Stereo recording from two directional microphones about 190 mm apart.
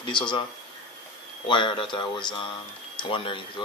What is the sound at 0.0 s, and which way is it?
Speech, 25° left (ahead or behind).